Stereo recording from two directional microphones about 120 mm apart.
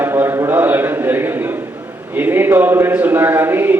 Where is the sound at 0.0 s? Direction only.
20° right (ahead or behind).